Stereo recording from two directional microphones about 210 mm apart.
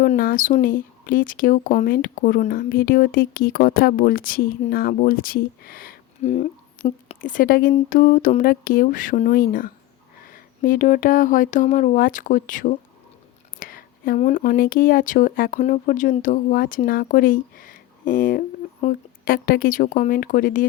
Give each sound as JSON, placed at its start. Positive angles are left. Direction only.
{"t": 0.0, "sound": "speech", "side_deg": 45}
{"t": 6.2, "sound": "speech", "side_deg": 30}